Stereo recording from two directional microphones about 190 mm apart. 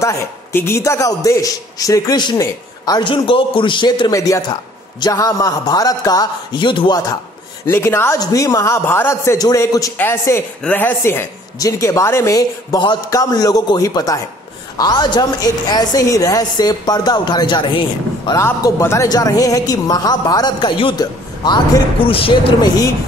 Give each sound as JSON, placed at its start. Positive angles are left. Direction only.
{"t": 0.0, "sound": "a man's voice", "side_deg": 15}
{"t": 7.6, "sound": "a man's voice", "side_deg": 10}
{"t": 18.4, "sound": "a man's voice", "side_deg": 15}